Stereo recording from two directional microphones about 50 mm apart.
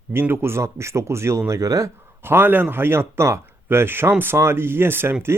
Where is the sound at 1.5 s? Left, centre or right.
Right.